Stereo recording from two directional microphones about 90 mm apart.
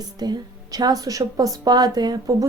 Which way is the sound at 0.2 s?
50° right (ahead or behind).